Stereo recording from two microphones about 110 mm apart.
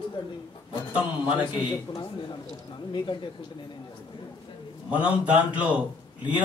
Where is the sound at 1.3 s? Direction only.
50° left (ahead or behind).